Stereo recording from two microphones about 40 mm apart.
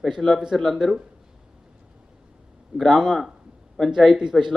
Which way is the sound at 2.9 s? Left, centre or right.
Centre.